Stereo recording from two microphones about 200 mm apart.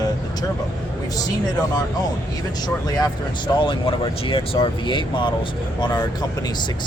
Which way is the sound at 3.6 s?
25° left (ahead or behind).